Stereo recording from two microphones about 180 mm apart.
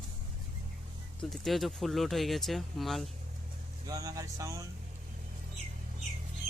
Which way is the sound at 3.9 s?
20° right (ahead or behind).